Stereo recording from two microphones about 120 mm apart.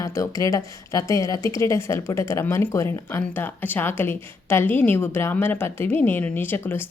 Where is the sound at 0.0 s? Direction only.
25° left (ahead or behind).